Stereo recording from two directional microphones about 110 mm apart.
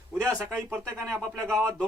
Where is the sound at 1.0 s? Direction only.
5° left (ahead or behind).